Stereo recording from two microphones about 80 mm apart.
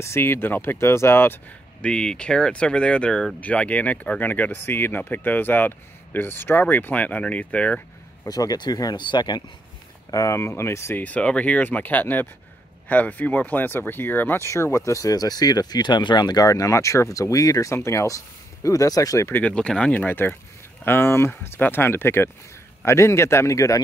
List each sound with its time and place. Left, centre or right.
0.0 s speech: left
1.8 s speech: centre
8.3 s speech: left
9.0 s speech: left
10.1 s a man's voice: left
11.0 s speech: centre
14.4 s speech: left
19.4 s a man's voice: centre; by 23.8 s left